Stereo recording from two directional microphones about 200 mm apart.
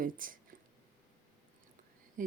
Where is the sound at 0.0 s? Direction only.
45° right (ahead or behind).